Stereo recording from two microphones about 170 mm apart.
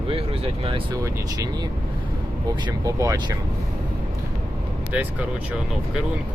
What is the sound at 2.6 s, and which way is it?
Speech, 20° right (ahead or behind).